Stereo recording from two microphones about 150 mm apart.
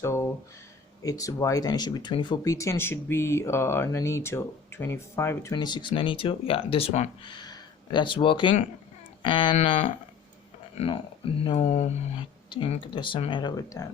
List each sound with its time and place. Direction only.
0.0 s speech: 20° left (ahead or behind); by 7.1 s 45° left (ahead or behind)
7.3 s speech: 30° left (ahead or behind)
11.5 s speech: 45° left (ahead or behind)
12.5 s speech: 30° left (ahead or behind)